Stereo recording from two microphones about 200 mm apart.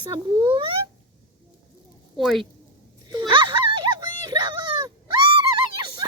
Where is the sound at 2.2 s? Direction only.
Centre (ahead or behind).